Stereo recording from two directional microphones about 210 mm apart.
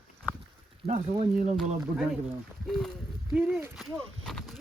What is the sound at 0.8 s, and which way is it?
Speech, 30° right (ahead or behind).